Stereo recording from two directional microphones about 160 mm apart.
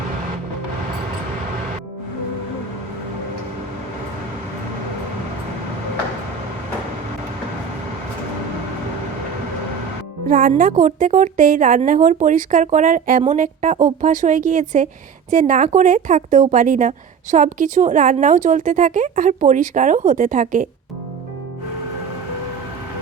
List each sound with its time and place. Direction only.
10.2 s a woman's voice: 55° right (ahead or behind)